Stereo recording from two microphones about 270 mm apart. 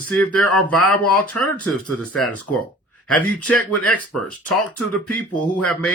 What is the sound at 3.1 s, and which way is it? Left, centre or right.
Speech, centre.